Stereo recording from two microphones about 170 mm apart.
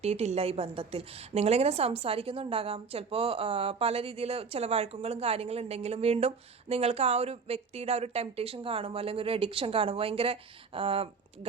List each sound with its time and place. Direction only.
0.0 s a woman's voice: 40° right (ahead or behind)